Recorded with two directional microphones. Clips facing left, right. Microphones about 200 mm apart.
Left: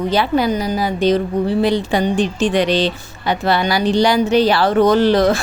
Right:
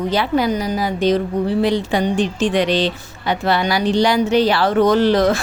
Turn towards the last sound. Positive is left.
turn(degrees=35)  # may be behind; listen again after turning